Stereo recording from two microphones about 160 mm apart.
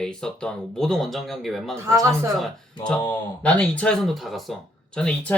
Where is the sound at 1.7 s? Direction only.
20° right (ahead or behind).